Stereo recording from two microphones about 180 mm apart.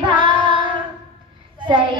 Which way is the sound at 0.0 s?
25° right (ahead or behind).